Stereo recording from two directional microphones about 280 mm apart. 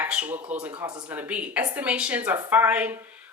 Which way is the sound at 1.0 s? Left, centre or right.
Centre.